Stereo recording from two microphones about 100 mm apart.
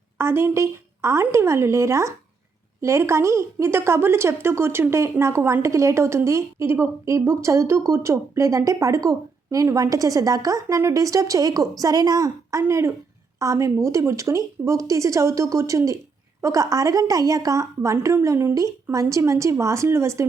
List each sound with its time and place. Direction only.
0.2 s a woman's voice: 25° right (ahead or behind)